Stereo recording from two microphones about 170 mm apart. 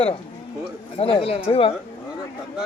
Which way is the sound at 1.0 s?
35° left (ahead or behind).